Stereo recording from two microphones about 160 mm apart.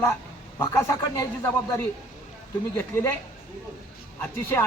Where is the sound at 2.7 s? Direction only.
15° left (ahead or behind).